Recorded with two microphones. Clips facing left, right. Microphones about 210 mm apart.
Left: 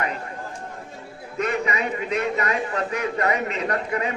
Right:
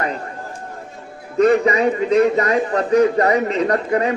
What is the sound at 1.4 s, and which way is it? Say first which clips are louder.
A man's voice: right 11 dB; 35° right (ahead or behind).